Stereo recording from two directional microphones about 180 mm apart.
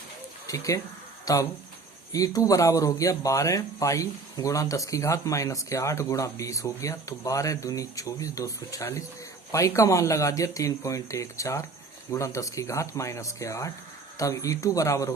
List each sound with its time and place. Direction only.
0.4 s speech: 20° left (ahead or behind)